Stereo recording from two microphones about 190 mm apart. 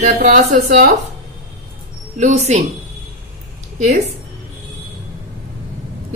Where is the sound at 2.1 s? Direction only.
35° right (ahead or behind).